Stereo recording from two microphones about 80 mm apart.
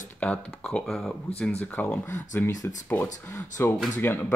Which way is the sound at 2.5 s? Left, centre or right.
Left.